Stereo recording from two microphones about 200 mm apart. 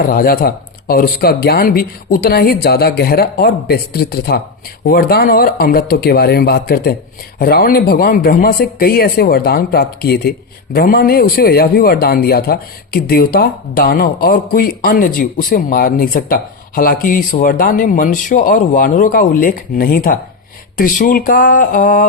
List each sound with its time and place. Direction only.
0.0 s speech: 45° left (ahead or behind)